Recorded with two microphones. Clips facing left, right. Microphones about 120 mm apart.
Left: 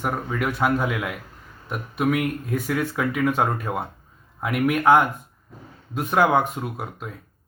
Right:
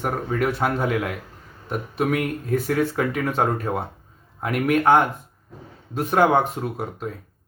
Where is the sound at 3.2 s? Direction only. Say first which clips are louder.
Left 3 dB; centre (ahead or behind).